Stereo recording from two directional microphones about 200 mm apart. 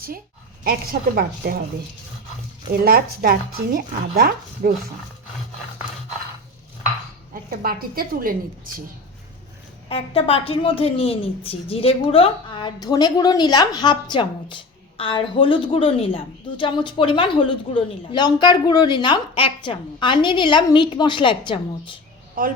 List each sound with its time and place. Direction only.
0.6 s speech: 50° right (ahead or behind)
2.8 s speech: 50° right (ahead or behind)
7.5 s speech: 50° right (ahead or behind)
9.9 s a woman's voice: 30° left (ahead or behind)
22.4 s speech: 45° right (ahead or behind)